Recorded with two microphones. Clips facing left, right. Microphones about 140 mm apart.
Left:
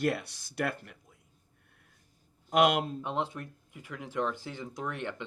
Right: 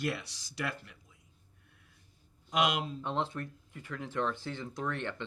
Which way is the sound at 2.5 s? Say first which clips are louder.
Left 5 dB; 50° left (ahead or behind).